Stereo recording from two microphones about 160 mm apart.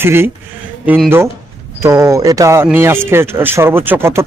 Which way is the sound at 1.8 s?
15° right (ahead or behind).